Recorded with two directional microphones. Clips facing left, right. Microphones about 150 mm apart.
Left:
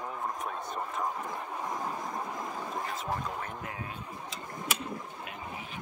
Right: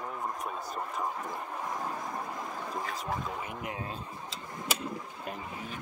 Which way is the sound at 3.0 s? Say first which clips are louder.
Even; 5° right (ahead or behind).